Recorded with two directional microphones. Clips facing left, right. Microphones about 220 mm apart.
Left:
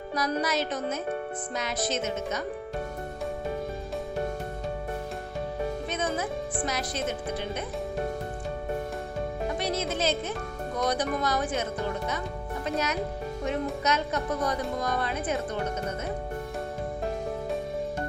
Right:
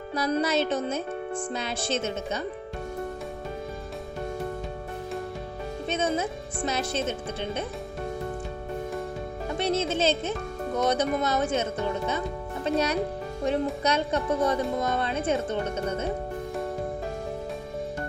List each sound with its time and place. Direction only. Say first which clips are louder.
0.1 s a woman's voice: right 3 dB; 25° right (ahead or behind)
5.9 s a woman's voice: right 3 dB; 25° right (ahead or behind)
9.6 s a woman's voice: right 6 dB; 25° right (ahead or behind)